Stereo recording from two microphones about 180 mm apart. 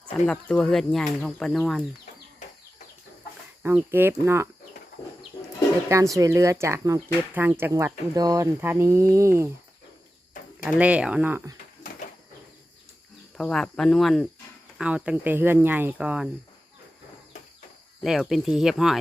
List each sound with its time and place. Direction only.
0.3 s speech: 5° left (ahead or behind)
3.6 s speech: 10° right (ahead or behind)
6.1 s speech: 15° right (ahead or behind)
10.6 s speech: 5° right (ahead or behind)
13.3 s speech: centre (ahead or behind)
18.0 s speech: centre (ahead or behind)